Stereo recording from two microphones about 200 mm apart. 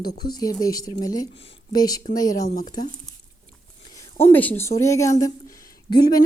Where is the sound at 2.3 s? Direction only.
40° left (ahead or behind).